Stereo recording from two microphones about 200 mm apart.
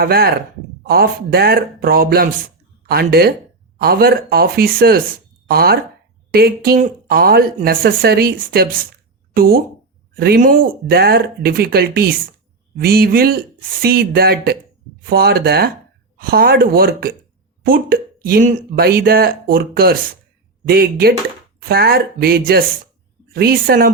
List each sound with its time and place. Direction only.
0.0 s speech: 50° right (ahead or behind)